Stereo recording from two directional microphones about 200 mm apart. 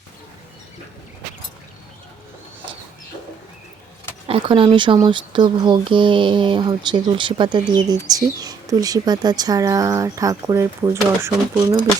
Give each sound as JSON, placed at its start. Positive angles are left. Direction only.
{"t": 4.3, "sound": "speech", "side_deg": -25}